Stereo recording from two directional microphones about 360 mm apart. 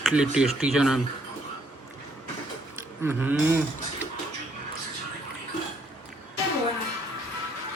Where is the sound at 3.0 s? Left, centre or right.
Centre.